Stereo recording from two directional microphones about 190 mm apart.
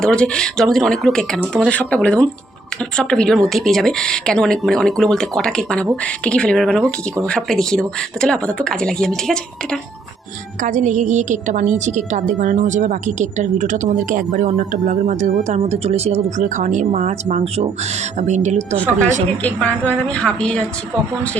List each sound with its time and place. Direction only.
0.0 s a woman's voice: 5° left (ahead or behind)
10.6 s a woman's voice: 40° right (ahead or behind)
19.4 s a woman's voice: 10° left (ahead or behind)